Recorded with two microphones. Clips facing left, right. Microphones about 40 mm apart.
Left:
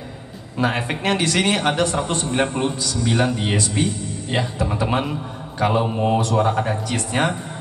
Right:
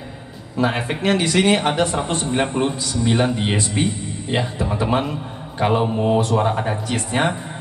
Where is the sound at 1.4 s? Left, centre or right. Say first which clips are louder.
Right 2 dB; right.